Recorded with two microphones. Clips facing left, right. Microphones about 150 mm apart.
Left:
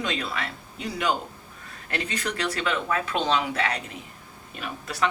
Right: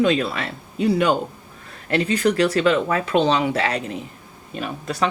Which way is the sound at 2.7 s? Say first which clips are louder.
Right 8 dB; 30° right (ahead or behind).